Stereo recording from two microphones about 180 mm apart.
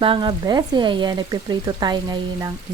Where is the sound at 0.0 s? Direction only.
30° right (ahead or behind).